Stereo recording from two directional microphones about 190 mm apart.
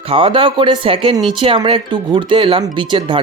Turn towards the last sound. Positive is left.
turn(degrees=-25)  # may be behind; listen again after turning